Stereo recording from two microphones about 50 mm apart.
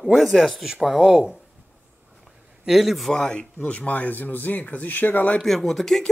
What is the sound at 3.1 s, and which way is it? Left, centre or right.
Speech, left.